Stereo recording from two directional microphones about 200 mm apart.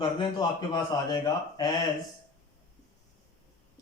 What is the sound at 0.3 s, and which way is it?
Speech, 20° left (ahead or behind).